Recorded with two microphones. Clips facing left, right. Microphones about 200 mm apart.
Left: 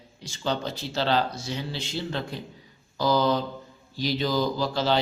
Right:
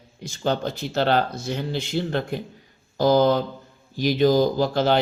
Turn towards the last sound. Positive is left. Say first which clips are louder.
# right 5 dB
turn(degrees=-55)  # may be behind; listen again after turning